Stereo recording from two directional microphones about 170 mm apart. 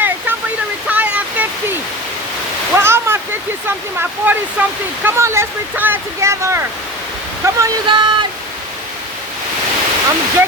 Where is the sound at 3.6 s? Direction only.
10° right (ahead or behind); by 8.2 s 25° right (ahead or behind).